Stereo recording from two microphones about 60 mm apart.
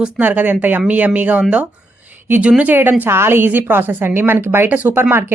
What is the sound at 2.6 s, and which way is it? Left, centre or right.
A woman's voice, right.